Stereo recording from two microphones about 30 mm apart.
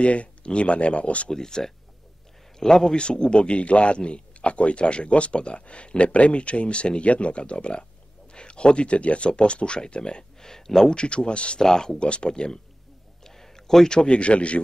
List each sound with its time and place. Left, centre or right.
0.0 s speech: left
1.3 s a man's voice: centre
2.9 s a man's voice: left
8.3 s a sound: left
8.9 s a man's voice: left
10.4 s speech: centre
11.0 s a man's voice: left
11.6 s speech: left
12.0 s a man's voice: left
13.2 s a sound: centre
13.8 s a man's voice: left